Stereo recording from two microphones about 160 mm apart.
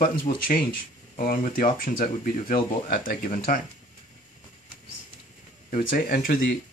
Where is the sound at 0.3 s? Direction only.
50° left (ahead or behind).